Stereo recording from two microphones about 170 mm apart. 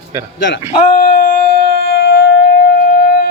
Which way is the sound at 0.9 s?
55° left (ahead or behind).